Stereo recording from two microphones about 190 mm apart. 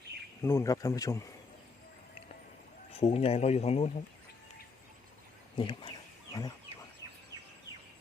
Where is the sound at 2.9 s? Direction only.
30° left (ahead or behind).